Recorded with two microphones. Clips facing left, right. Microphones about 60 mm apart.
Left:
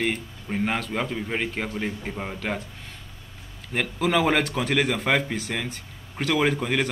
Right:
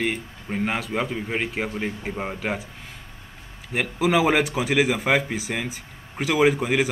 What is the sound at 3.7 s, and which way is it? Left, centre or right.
Speech, centre.